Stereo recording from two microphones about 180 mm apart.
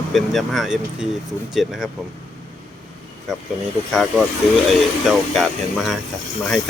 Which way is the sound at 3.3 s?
Centre (ahead or behind).